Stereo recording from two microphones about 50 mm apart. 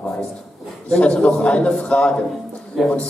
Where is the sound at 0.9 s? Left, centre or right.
Centre.